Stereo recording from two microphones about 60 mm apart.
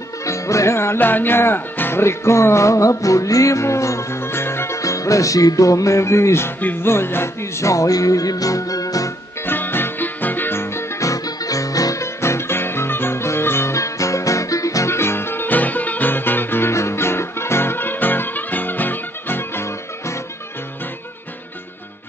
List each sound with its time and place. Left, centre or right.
0.2 s music: left
4.2 s music: left
6.6 s speech: left
7.6 s music: left
9.5 s music: left
11.0 s music: left
13.7 s music: left
14.9 s music: left
16.7 s music: left